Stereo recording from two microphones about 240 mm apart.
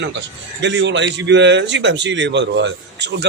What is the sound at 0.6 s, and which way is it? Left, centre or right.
A man's voice, right.